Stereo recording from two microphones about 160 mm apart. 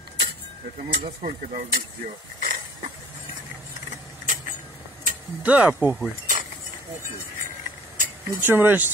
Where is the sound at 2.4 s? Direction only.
55° right (ahead or behind).